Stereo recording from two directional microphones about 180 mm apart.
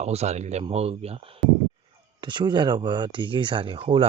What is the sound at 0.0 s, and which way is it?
Speech, 35° right (ahead or behind).